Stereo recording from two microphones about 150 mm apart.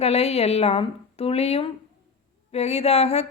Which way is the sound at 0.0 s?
45° left (ahead or behind).